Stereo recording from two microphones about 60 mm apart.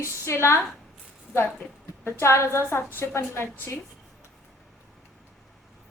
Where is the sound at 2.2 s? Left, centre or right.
Left.